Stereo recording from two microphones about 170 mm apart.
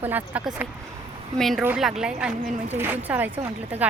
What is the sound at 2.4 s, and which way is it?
Speech, 45° right (ahead or behind).